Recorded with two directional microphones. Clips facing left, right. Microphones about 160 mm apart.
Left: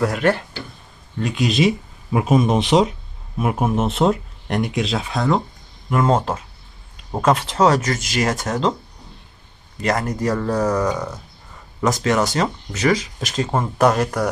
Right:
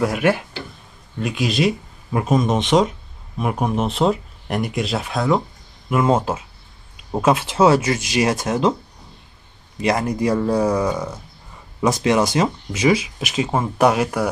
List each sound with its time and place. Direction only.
0.0 s speech: 10° right (ahead or behind)
9.8 s speech: 10° right (ahead or behind)